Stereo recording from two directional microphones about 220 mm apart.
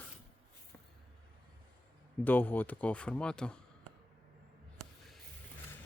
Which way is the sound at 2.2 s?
10° left (ahead or behind).